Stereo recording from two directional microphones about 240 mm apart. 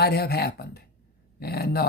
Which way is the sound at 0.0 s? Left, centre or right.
Left.